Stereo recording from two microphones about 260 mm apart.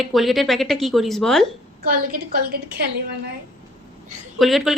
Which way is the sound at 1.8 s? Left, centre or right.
Right.